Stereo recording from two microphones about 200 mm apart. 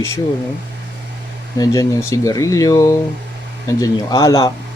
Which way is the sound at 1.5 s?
15° left (ahead or behind).